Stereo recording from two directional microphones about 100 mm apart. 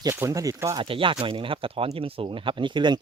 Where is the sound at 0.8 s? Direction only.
60° right (ahead or behind).